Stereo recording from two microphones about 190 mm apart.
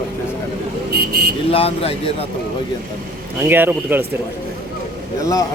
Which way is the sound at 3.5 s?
10° right (ahead or behind).